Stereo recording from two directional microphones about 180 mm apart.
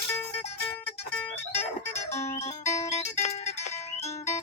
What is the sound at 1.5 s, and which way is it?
Music, 35° left (ahead or behind).